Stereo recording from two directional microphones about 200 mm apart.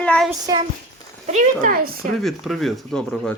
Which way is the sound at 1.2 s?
40° right (ahead or behind).